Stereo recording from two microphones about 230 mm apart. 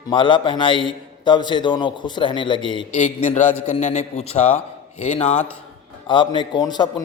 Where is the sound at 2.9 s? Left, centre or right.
Left.